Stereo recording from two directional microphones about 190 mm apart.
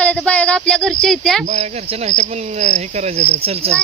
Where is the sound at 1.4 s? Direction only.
35° right (ahead or behind).